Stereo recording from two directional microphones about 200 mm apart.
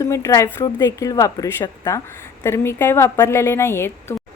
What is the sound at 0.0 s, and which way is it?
A woman's voice, 15° left (ahead or behind).